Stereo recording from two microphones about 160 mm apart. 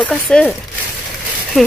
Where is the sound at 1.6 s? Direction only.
Centre (ahead or behind).